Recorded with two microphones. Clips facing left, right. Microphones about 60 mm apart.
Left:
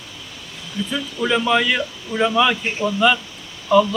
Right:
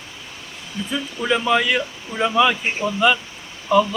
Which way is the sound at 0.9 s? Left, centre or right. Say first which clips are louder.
Even; centre.